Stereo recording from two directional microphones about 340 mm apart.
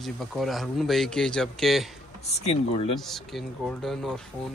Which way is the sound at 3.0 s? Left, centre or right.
Centre.